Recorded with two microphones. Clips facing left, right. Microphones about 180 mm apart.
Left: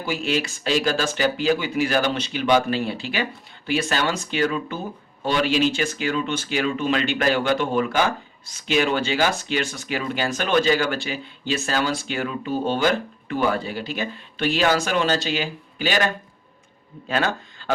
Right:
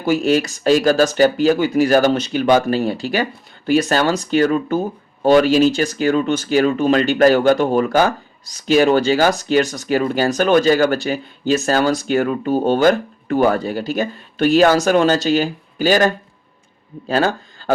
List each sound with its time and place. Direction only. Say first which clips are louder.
0.0 s speech: right 9 dB; 45° right (ahead or behind)